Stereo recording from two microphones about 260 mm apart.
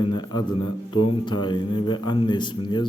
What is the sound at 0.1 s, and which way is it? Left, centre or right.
A man's voice, centre.